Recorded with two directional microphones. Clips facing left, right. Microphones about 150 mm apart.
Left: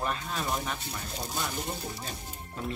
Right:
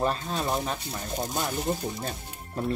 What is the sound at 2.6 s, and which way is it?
Speech, 40° right (ahead or behind).